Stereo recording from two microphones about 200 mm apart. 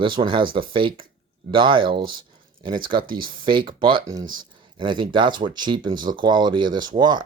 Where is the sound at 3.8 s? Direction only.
25° right (ahead or behind).